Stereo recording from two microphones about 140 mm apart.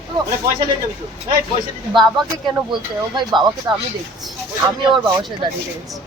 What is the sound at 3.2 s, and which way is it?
Female singing, 30° right (ahead or behind).